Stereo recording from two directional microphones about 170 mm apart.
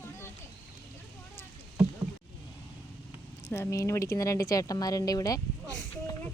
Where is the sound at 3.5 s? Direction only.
15° left (ahead or behind).